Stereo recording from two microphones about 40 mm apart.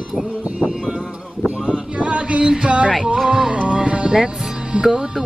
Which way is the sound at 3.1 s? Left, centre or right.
Centre.